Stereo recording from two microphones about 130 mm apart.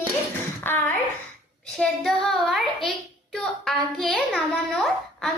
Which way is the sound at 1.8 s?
5° left (ahead or behind).